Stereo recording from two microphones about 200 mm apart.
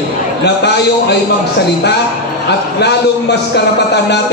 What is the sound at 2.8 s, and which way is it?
Speech, 55° left (ahead or behind).